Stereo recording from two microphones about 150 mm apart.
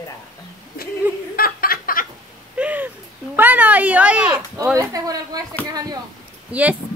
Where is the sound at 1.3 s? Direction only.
80° left.